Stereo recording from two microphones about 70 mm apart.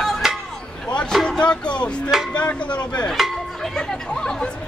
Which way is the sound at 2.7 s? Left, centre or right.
Centre.